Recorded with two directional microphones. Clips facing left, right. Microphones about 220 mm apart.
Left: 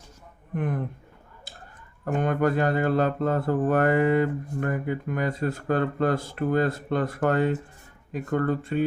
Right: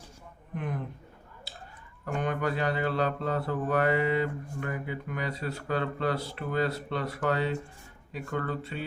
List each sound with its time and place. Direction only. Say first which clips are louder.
0.5 s speech: left 6 dB; 50° left (ahead or behind)
2.0 s speech: left 6 dB; 45° left (ahead or behind)